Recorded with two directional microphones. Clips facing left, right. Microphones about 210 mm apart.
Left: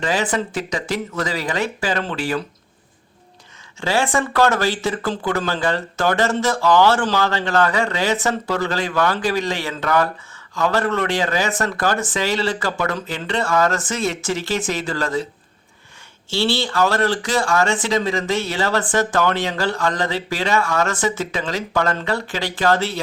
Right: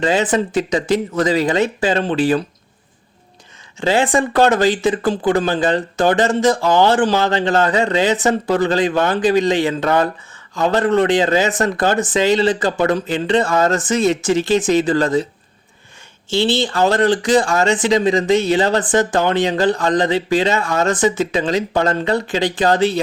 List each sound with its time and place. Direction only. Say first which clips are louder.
0.0 s speech: right 5 dB; 20° right (ahead or behind)
3.8 s speech: right 4 dB; 20° right (ahead or behind)
16.3 s speech: right 4 dB; 20° right (ahead or behind)